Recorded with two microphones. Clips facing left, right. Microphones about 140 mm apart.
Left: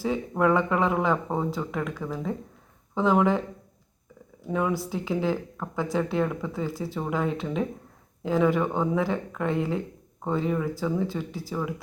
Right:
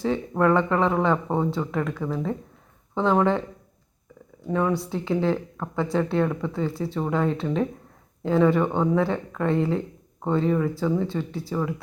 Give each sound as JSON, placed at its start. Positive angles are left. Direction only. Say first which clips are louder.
{"t": 0.0, "sound": "speech", "louder": "right 2 dB", "side_deg": 5}
{"t": 4.4, "sound": "speech", "louder": "right 3 dB", "side_deg": 5}